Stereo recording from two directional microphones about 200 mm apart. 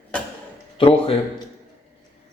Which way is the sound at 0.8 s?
30° left (ahead or behind).